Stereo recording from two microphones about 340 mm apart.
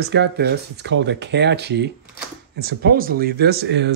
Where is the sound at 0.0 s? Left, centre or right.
Right.